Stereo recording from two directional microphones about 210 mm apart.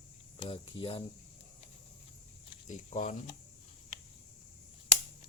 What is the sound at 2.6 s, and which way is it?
Speech, 35° left (ahead or behind).